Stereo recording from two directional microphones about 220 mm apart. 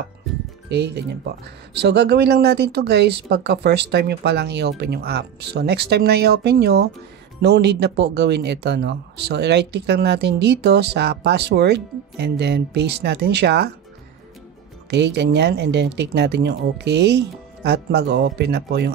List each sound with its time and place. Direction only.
0.7 s speech: 50° right (ahead or behind)
14.9 s speech: 50° right (ahead or behind)